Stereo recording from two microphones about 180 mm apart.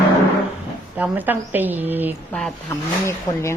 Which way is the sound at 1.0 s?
10° right (ahead or behind).